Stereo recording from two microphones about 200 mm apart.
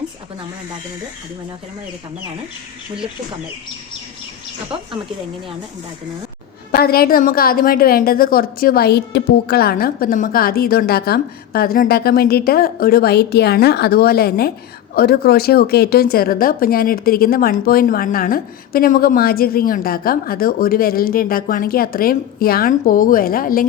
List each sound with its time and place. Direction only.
6.7 s speech: 50° left (ahead or behind)